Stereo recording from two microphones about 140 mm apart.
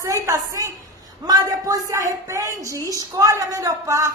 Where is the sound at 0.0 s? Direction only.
20° right (ahead or behind).